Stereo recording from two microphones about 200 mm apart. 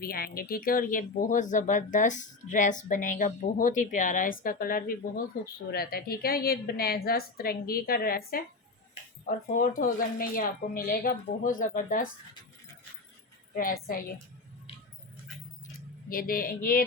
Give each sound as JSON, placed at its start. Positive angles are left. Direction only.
{"t": 0.0, "sound": "speech", "side_deg": 50}
{"t": 13.6, "sound": "speech", "side_deg": 45}
{"t": 16.0, "sound": "speech", "side_deg": 45}